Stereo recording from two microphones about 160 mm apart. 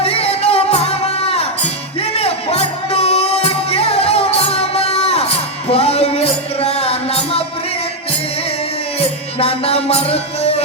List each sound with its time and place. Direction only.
0.0 s music: 40° left (ahead or behind)
9.0 s music: 40° left (ahead or behind)